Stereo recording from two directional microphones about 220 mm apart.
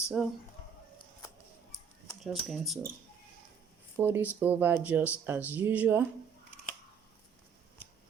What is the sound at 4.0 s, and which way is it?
Speech, 10° right (ahead or behind).